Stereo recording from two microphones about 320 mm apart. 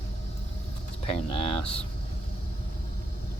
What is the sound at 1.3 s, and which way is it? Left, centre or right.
Speech, centre.